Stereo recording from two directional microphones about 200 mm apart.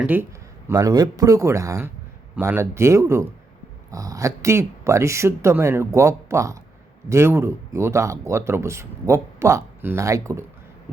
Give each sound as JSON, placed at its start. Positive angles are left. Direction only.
{"t": 0.0, "sound": "speech", "side_deg": -10}